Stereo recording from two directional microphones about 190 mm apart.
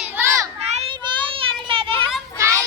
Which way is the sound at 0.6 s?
35° right (ahead or behind).